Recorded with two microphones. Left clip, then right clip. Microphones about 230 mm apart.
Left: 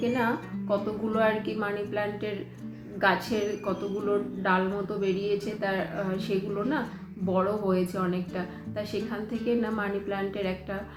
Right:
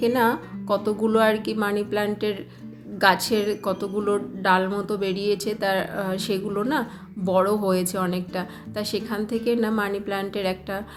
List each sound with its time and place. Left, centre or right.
0.0 s a woman's voice: right